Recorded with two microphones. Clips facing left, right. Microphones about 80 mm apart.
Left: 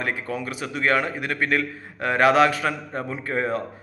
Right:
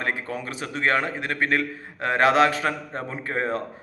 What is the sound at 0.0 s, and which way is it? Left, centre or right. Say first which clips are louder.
A man's voice: left 1 dB; right.